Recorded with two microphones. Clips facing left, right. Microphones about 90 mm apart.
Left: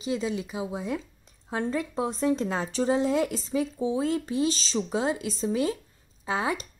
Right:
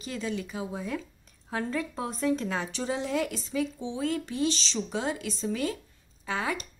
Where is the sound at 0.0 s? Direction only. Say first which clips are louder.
Left 4 dB; 20° left (ahead or behind).